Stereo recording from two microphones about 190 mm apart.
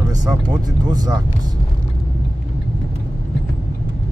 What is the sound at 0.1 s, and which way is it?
Speech, 20° right (ahead or behind).